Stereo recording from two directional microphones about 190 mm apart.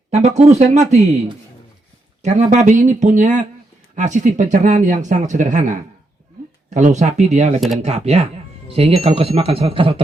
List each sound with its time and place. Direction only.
0.1 s speech: 35° right (ahead or behind)
2.2 s speech: 40° right (ahead or behind)
6.7 s speech: 40° right (ahead or behind)